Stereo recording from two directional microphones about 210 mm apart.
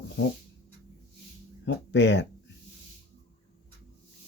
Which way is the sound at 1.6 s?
55° left (ahead or behind).